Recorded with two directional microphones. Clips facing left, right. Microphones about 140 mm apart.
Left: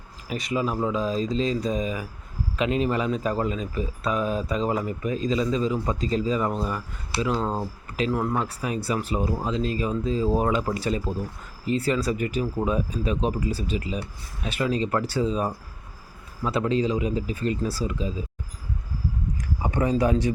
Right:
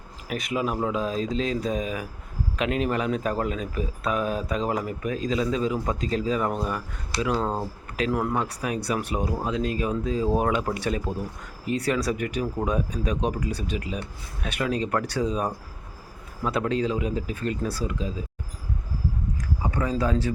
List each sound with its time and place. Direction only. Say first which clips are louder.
0.3 s speech: left 1 dB; 5° right (ahead or behind)
13.5 s speech: left 2 dB; 60° right (ahead or behind)
13.8 s speech: left 1 dB; centre (ahead or behind)
19.6 s speech: left 3 dB; 20° left (ahead or behind)